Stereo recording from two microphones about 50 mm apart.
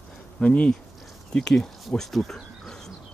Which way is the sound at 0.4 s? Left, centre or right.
Left.